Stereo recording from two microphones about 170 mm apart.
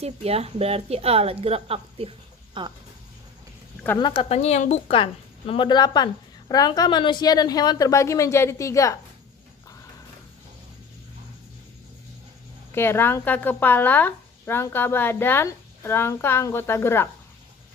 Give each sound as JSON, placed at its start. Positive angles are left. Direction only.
{"t": 0.0, "sound": "speech", "side_deg": -35}
{"t": 3.9, "sound": "speech", "side_deg": 30}
{"t": 5.5, "sound": "a woman's voice", "side_deg": 30}
{"t": 12.7, "sound": "speech", "side_deg": 15}